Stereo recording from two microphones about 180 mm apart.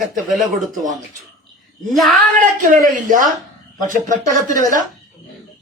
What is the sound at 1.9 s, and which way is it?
Speech, centre (ahead or behind).